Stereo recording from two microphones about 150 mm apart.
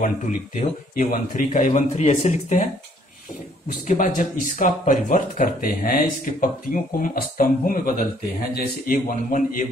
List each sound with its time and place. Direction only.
0.0 s a man's voice: 65° left (ahead or behind)
3.8 s speech: 55° left (ahead or behind)